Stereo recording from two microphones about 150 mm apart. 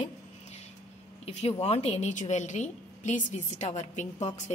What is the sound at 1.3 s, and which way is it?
A woman's voice, 45° left (ahead or behind).